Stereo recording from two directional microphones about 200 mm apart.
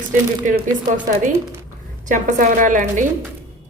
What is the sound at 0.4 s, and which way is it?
Speech, 40° right (ahead or behind).